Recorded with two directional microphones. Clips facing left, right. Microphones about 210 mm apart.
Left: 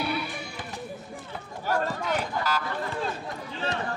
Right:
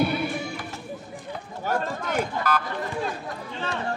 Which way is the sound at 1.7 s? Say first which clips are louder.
Even; 50° right (ahead or behind).